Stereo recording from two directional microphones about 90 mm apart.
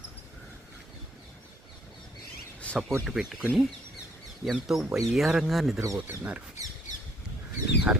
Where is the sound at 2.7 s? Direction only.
15° left (ahead or behind).